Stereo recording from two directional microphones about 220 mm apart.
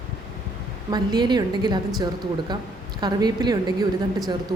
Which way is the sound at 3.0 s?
20° right (ahead or behind).